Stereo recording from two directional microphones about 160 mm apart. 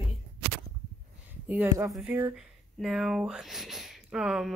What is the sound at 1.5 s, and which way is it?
Speech, 10° right (ahead or behind).